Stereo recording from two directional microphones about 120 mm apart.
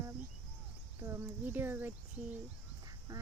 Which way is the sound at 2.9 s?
30° right (ahead or behind).